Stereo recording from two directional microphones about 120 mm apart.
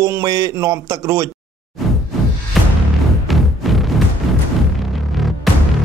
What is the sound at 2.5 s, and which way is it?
Music, centre (ahead or behind).